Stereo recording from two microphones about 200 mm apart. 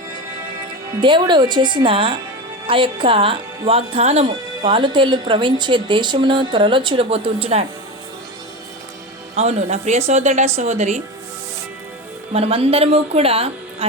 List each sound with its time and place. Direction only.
1.0 s speech: 25° right (ahead or behind)
9.3 s speech: 30° right (ahead or behind)
12.3 s speech: 30° right (ahead or behind)